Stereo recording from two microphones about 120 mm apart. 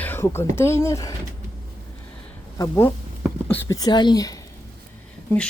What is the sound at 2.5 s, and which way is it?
Speech, 20° left (ahead or behind).